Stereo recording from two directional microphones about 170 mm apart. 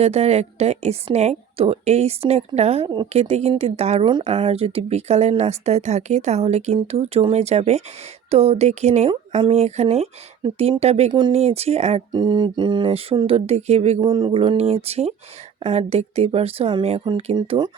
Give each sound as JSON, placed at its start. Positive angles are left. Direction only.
{"t": 0.0, "sound": "a woman's voice", "side_deg": -40}
{"t": 12.1, "sound": "a woman's voice", "side_deg": -25}
{"t": 14.0, "sound": "a woman's voice", "side_deg": -30}